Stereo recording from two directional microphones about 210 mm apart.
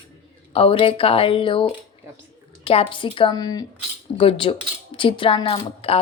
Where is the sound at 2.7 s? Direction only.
25° left (ahead or behind).